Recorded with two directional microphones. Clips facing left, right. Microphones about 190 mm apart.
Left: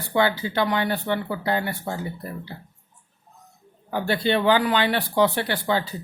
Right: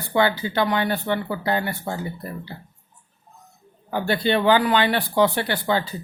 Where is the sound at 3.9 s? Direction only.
55° right (ahead or behind).